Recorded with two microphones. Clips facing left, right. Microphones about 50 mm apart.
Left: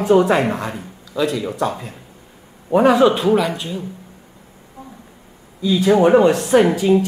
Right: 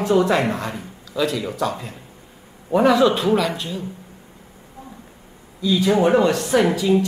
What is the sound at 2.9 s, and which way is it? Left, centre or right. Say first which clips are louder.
Speech: left 3 dB; centre.